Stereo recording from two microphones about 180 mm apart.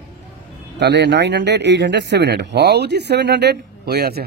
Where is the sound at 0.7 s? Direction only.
75° right (ahead or behind).